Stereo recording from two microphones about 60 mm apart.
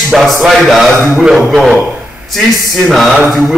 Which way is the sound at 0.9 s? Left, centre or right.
Right.